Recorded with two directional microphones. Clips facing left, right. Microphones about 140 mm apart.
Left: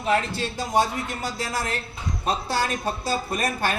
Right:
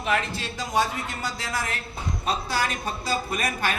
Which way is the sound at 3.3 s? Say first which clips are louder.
Left 2 dB; 30° left (ahead or behind).